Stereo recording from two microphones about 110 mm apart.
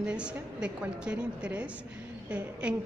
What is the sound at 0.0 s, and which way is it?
A woman's voice, 10° right (ahead or behind).